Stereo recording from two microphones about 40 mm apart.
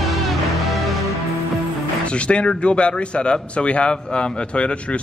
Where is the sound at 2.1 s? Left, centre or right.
Left.